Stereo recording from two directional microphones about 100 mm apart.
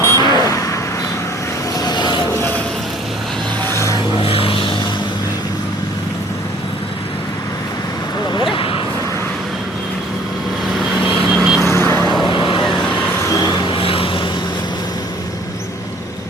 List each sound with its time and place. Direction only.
0.0 s vehicle: 45° left (ahead or behind)
1.8 s vehicle: 45° left (ahead or behind)
3.6 s vehicle: 25° left (ahead or behind)
4.1 s vehicle: 65° left (ahead or behind)
8.3 s a sound: 55° left (ahead or behind)
10.8 s vehicle: centre (ahead or behind)
11.6 s vehicle: 25° left (ahead or behind)
12.0 s vehicle: centre (ahead or behind)
12.3 s vehicle: 55° left (ahead or behind)
13.2 s vehicle: 40° left (ahead or behind); by 14.2 s 65° left (ahead or behind)